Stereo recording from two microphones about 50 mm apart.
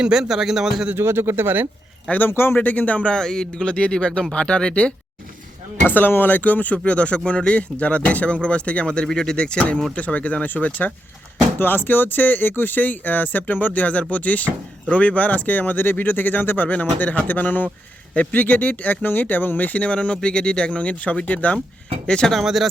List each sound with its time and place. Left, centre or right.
0.0 s speech: centre
0.9 s speech: right
2.0 s speech: left
2.3 s speech: left
2.6 s speech: left
5.8 s speech: left
11.6 s speech: left
16.6 s speech: left
22.0 s speech: centre
22.3 s speech: centre